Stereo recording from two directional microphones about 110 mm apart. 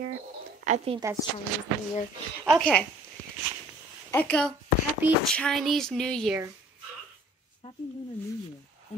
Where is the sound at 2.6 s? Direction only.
10° left (ahead or behind).